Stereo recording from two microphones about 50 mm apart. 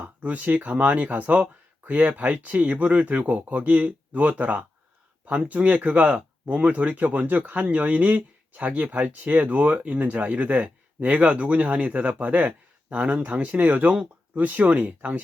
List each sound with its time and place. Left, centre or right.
0.0 s speech: right